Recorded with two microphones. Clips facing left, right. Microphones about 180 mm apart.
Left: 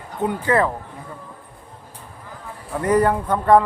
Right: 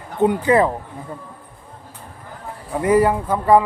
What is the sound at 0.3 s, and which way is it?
Speech, 20° right (ahead or behind).